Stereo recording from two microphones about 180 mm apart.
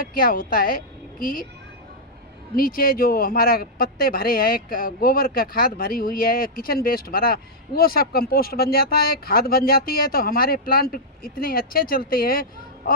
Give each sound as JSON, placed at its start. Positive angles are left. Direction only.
{"t": 0.0, "sound": "a woman's voice", "side_deg": 55}
{"t": 2.6, "sound": "speech", "side_deg": 55}